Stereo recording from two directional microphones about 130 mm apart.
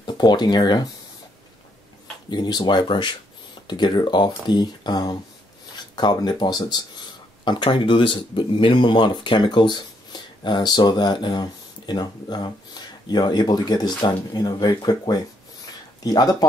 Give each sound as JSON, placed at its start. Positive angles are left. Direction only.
{"t": 0.0, "sound": "speech", "side_deg": 35}
{"t": 2.2, "sound": "speech", "side_deg": 35}